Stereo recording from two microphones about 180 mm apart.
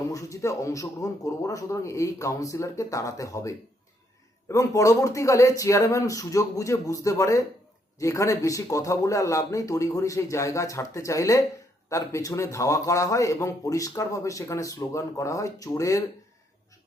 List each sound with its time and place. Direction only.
0.1 s a man's voice: 20° left (ahead or behind)